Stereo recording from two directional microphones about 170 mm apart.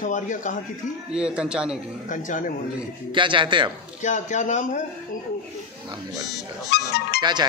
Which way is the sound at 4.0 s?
45° left (ahead or behind).